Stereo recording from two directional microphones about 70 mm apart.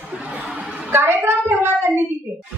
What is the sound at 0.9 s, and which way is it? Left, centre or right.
A woman's voice, right.